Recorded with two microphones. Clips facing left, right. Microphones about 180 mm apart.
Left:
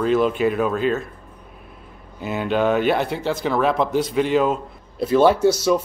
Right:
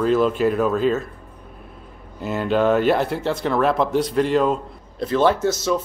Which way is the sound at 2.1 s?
Centre (ahead or behind).